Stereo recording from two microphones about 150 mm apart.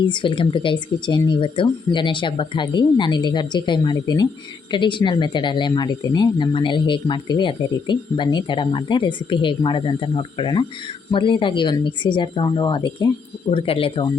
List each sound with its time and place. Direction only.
0.0 s speech: 30° left (ahead or behind)